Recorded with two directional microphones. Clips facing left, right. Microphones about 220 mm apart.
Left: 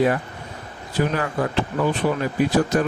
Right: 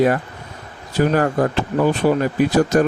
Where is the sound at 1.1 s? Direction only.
45° right (ahead or behind).